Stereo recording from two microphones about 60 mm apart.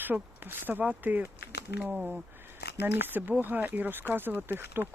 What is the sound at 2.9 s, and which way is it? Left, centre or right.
Speech, right.